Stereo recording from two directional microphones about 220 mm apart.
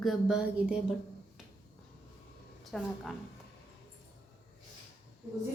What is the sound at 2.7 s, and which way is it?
Speech, centre (ahead or behind).